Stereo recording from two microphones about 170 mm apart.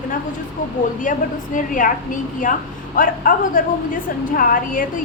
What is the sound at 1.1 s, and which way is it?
A woman's voice, 50° left (ahead or behind).